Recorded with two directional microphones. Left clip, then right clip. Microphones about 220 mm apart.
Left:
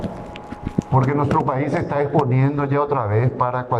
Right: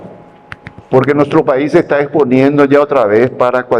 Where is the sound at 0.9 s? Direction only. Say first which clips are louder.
Right 10 dB; 50° right (ahead or behind).